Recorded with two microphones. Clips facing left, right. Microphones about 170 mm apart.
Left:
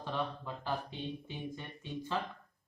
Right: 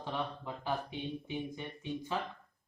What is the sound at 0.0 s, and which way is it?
Speech, 15° right (ahead or behind).